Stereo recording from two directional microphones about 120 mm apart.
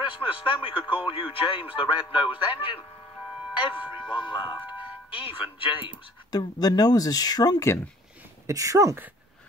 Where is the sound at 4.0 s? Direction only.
40° left (ahead or behind).